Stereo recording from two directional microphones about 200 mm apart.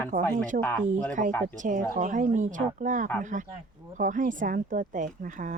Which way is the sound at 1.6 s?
40° right (ahead or behind).